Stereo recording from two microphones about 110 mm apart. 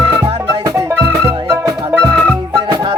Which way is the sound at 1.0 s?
20° right (ahead or behind).